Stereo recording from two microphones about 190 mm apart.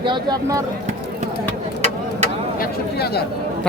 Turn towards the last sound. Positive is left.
turn(degrees=55)  # may be behind; listen again after turning